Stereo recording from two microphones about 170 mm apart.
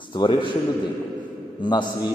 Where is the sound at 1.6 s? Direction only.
25° left (ahead or behind).